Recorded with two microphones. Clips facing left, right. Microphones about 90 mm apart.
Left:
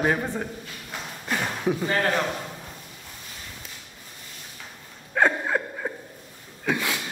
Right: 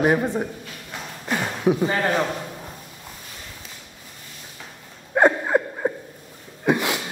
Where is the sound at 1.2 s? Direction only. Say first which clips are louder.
Right 4 dB; 10° right (ahead or behind).